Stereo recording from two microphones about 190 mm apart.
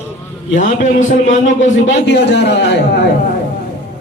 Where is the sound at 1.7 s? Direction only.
65° left (ahead or behind).